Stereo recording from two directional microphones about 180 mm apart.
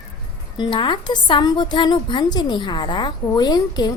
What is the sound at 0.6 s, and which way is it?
A woman's voice, 25° left (ahead or behind).